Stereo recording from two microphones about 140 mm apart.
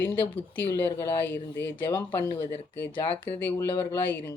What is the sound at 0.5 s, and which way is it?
Speech, 15° left (ahead or behind).